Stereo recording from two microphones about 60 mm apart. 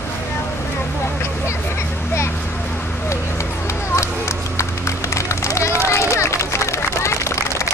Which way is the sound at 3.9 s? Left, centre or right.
Left.